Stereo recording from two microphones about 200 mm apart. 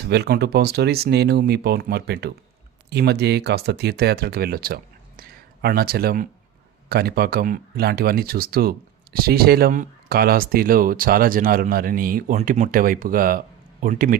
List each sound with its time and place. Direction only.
0.0 s speech: 55° right (ahead or behind)